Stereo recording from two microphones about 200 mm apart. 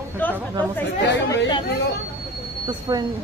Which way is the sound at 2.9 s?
15° right (ahead or behind).